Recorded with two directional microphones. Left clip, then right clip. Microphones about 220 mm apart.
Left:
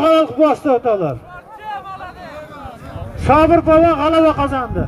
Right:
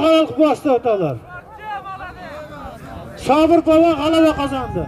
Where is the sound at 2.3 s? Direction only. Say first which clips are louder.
Even; 55° right (ahead or behind).